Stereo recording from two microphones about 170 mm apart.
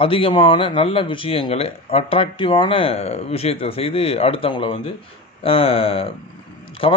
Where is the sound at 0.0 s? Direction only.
30° left (ahead or behind).